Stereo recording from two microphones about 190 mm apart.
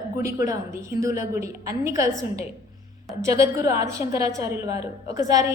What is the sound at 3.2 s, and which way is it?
A woman's voice, 15° right (ahead or behind).